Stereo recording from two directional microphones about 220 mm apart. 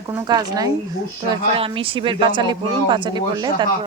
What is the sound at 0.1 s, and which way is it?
Speech, 15° right (ahead or behind).